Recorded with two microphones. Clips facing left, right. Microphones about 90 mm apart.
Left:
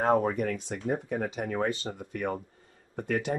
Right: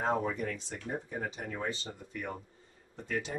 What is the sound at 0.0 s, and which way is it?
Speech, 50° left (ahead or behind).